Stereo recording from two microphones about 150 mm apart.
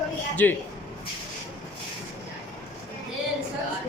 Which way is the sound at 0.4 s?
10° left (ahead or behind).